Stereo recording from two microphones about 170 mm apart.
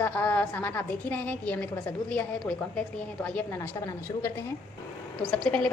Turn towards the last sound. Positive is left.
turn(degrees=5)  # may be behind; listen again after turning